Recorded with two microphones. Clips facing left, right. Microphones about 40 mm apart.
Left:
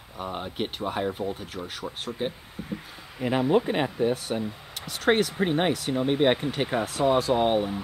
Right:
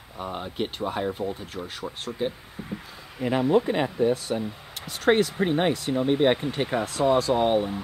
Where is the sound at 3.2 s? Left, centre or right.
Centre.